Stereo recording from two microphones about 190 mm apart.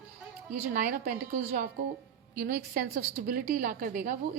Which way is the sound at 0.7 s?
45° right (ahead or behind).